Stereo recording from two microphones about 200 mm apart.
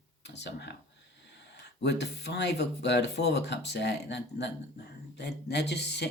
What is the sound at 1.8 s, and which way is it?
Speech, 55° left (ahead or behind).